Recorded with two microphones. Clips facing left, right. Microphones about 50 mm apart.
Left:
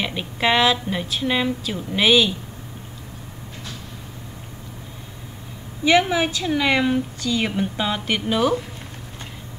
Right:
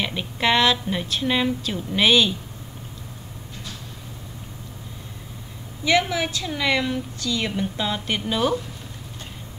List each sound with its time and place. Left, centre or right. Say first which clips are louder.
0.0 s a woman's voice: left 1 dB; centre
5.9 s a woman's voice: left 3 dB; left